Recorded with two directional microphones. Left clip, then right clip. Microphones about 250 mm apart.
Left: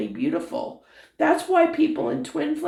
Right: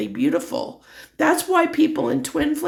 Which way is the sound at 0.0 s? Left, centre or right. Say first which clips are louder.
Right 4 dB; right.